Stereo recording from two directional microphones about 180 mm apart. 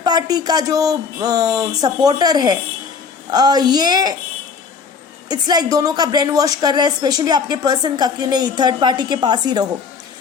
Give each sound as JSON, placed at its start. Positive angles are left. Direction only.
{"t": 0.0, "sound": "a woman's voice", "side_deg": -20}
{"t": 5.3, "sound": "a woman's voice", "side_deg": -20}